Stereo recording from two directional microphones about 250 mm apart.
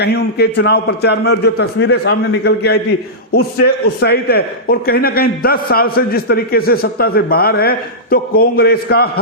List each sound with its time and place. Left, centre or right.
0.0 s a man's voice: left
3.8 s a man's voice: left